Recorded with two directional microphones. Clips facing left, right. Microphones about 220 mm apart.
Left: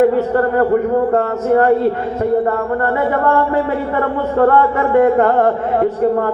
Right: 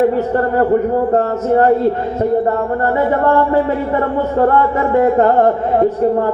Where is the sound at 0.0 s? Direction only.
30° right (ahead or behind).